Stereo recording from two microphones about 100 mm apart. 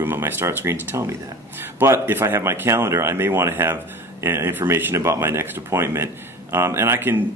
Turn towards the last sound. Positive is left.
turn(degrees=-25)  # may be behind; listen again after turning